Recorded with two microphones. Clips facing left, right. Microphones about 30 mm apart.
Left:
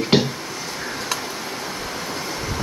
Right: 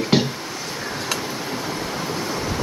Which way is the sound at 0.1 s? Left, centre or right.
Left.